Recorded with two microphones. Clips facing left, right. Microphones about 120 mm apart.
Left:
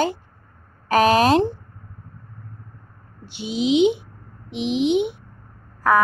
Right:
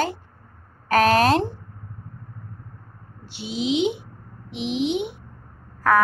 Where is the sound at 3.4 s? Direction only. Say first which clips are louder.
Left 5 dB; centre (ahead or behind).